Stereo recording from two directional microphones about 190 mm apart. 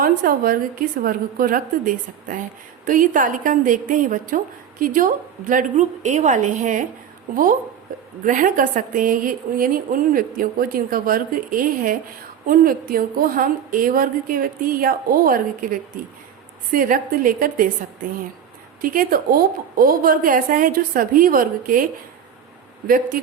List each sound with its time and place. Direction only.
0.0 s a woman's voice: 50° right (ahead or behind)
8.2 s a woman's voice: 45° right (ahead or behind)
16.7 s a woman's voice: 45° right (ahead or behind)
18.8 s a woman's voice: 50° right (ahead or behind)